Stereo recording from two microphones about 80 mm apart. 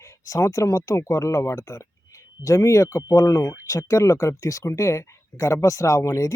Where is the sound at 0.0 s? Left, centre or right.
Left.